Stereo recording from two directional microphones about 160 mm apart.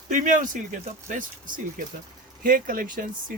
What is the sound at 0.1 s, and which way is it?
Speech, 55° right (ahead or behind).